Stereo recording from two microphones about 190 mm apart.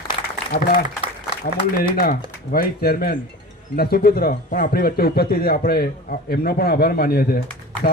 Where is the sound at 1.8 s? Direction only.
50° left (ahead or behind).